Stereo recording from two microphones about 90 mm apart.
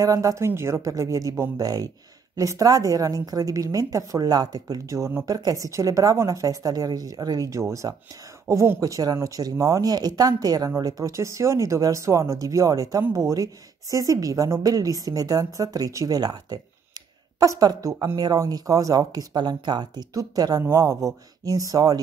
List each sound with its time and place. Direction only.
0.0 s a woman's voice: 40° right (ahead or behind); by 20.1 s 55° right (ahead or behind)
20.2 s a woman's voice: 40° right (ahead or behind)